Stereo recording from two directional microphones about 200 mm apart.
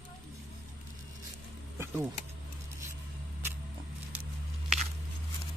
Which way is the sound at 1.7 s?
10° right (ahead or behind).